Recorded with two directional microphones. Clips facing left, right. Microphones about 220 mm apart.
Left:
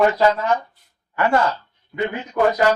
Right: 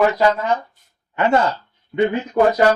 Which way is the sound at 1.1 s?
20° right (ahead or behind).